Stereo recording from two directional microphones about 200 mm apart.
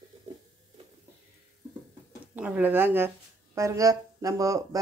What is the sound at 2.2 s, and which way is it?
Speech, 5° right (ahead or behind).